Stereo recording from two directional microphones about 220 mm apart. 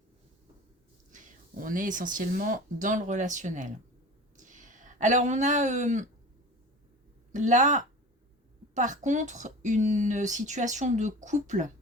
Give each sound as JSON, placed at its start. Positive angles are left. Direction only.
{"t": 1.1, "sound": "speech", "side_deg": -35}
{"t": 4.4, "sound": "a sound", "side_deg": -35}
{"t": 7.3, "sound": "speech", "side_deg": -35}